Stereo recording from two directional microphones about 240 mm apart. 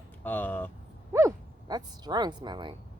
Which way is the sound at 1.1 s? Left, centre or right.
Centre.